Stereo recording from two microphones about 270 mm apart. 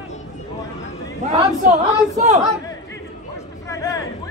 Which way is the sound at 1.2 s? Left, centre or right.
Right.